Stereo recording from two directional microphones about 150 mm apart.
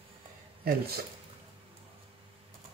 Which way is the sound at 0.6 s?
90° right.